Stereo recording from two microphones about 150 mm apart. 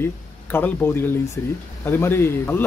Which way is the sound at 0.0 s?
15° left (ahead or behind).